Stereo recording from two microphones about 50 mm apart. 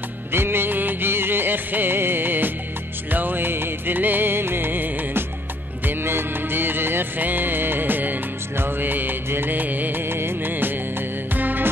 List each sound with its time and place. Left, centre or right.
0.3 s music: right
10.0 s music of bollywood: right